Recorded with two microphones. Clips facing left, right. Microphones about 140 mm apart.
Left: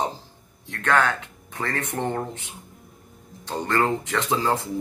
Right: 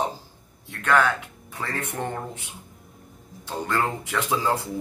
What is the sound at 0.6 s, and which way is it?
Speech, 10° right (ahead or behind).